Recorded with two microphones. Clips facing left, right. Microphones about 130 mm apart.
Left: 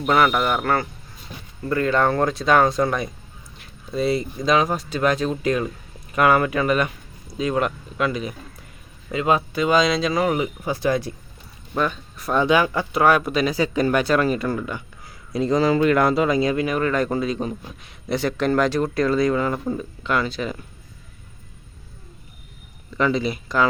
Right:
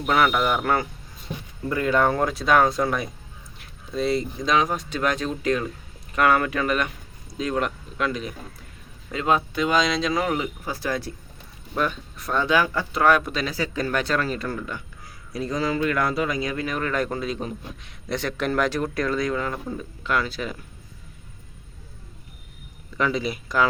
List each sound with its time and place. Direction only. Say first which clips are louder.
0.1 s a man's voice: left 2 dB; centre (ahead or behind)
10.3 s speech: left 4 dB; 20° left (ahead or behind)
11.8 s speech: left 2 dB; centre (ahead or behind)
12.3 s speech: left 3 dB; 15° left (ahead or behind)
15.0 s a man's voice: left 7 dB; 25° left (ahead or behind)
16.6 s a man's voice: left 5 dB; 5° left (ahead or behind)
23.0 s speech: left 3 dB; 5° right (ahead or behind)